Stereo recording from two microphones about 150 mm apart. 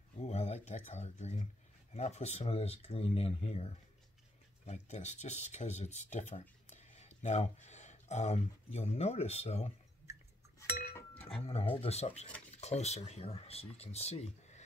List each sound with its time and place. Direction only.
0.2 s speech: 45° left (ahead or behind)
10.1 s chink: 20° right (ahead or behind)
10.6 s chink: 20° left (ahead or behind)
11.7 s speech: 40° left (ahead or behind)